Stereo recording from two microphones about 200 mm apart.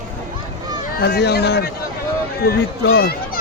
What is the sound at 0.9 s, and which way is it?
Speech, 55° left (ahead or behind).